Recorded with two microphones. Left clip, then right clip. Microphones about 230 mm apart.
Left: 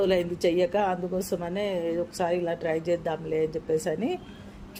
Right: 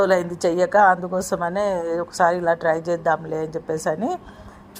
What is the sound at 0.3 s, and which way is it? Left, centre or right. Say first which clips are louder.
A woman's voice: right 7 dB; centre.